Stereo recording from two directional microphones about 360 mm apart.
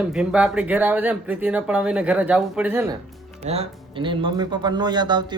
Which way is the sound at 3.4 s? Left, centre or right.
Centre.